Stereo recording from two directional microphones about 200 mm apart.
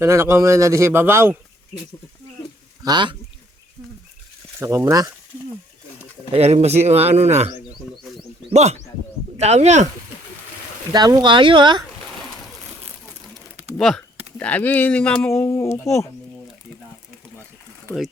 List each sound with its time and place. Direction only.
0.0 s a man's voice: 15° right (ahead or behind)
2.8 s speech: 20° right (ahead or behind)
4.6 s a man's voice: 15° right (ahead or behind)
6.3 s speech: 30° right (ahead or behind)
8.5 s speech: 35° right (ahead or behind)
10.9 s speech: 20° right (ahead or behind)
13.7 s speech: centre (ahead or behind)